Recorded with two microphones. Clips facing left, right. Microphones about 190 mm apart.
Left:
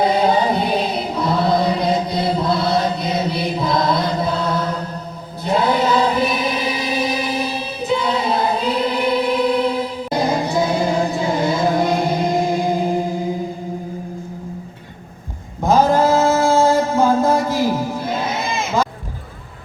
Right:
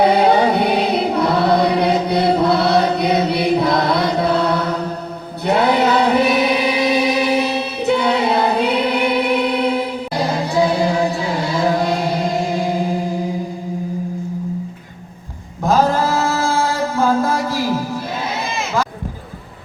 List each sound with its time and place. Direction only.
0.0 s choir: 65° right (ahead or behind)
10.1 s music: 20° left (ahead or behind)
15.6 s a sound: 20° left (ahead or behind)